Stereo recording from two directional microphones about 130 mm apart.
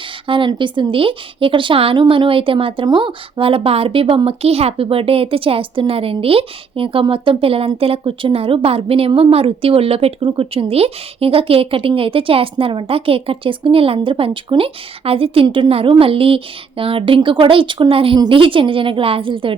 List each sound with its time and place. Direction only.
0.3 s a woman's voice: 40° right (ahead or behind)